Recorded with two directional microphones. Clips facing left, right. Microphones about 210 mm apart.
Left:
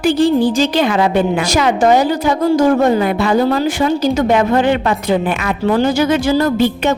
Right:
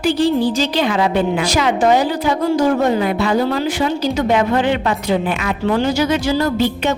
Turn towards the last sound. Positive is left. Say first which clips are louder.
# left 3 dB
turn(degrees=50)  # may be behind; listen again after turning